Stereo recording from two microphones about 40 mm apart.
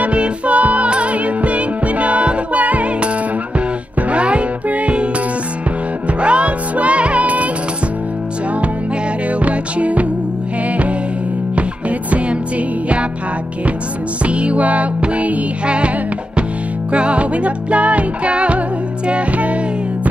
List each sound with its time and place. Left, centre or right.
0.0 s music: right
4.1 s music: right
6.2 s music: right
9.4 s music: right
14.2 s music: right
16.9 s music: right